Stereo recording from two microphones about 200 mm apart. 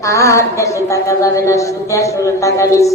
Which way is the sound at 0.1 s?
15° left (ahead or behind).